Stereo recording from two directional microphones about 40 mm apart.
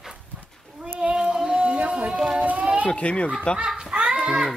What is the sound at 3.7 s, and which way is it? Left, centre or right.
Music, centre.